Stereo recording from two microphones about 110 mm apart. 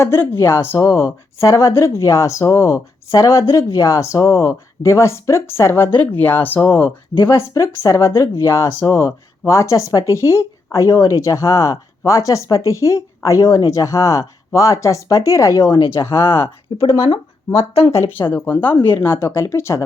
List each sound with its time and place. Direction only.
0.0 s speech: 25° left (ahead or behind)
16.0 s speech: 25° left (ahead or behind)
16.7 s speech: 60° left (ahead or behind)
18.3 s speech: 15° left (ahead or behind)